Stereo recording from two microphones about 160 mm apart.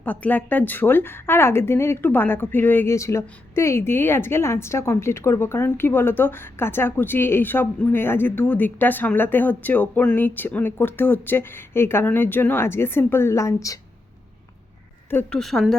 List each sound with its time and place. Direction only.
0.0 s a woman's voice: 10° left (ahead or behind)
15.1 s a woman's voice: 5° left (ahead or behind)